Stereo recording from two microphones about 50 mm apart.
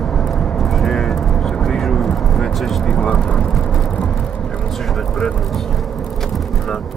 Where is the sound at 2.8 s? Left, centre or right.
Centre.